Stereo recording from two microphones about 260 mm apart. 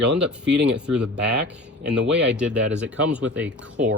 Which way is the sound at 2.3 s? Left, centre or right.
Centre.